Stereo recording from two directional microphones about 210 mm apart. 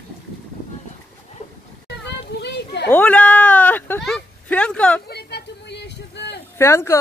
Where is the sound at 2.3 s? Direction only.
50° left (ahead or behind).